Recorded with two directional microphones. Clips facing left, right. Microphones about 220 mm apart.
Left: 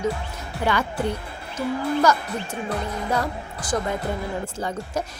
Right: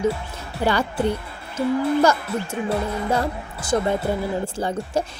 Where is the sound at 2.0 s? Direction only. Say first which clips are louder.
Right 2 dB; 30° right (ahead or behind).